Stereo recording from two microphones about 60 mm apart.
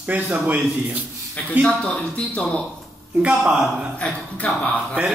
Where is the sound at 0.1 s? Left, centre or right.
Right.